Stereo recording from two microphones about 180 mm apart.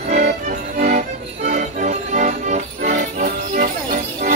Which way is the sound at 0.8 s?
50° right (ahead or behind).